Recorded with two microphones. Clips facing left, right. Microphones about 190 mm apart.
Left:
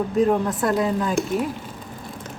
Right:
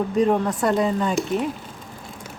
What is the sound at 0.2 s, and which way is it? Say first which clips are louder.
Speech: even; centre (ahead or behind).